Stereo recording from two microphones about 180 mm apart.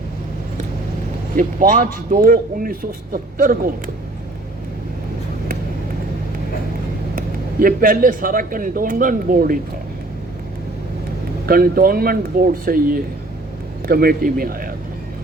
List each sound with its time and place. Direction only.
1.4 s a man's voice: 50° right (ahead or behind)
7.2 s a man's voice: 50° right (ahead or behind)
11.4 s a man's voice: 55° right (ahead or behind)